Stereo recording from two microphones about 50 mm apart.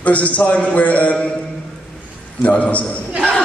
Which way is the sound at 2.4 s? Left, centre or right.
Left.